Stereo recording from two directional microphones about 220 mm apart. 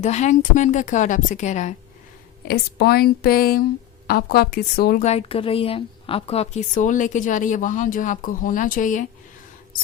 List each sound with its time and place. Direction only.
0.0 s a woman's voice: 30° left (ahead or behind)
2.4 s speech: 45° left (ahead or behind)
5.0 s a woman's voice: 25° left (ahead or behind)